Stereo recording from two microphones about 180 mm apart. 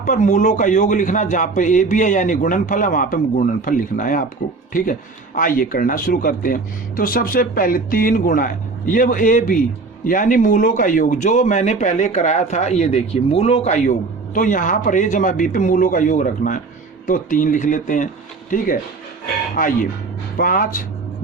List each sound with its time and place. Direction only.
0.0 s a man's voice: 45° left (ahead or behind)